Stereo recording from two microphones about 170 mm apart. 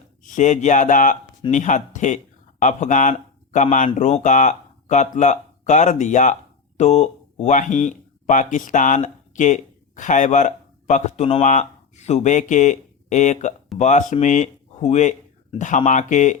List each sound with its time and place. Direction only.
0.2 s speech: 50° left (ahead or behind)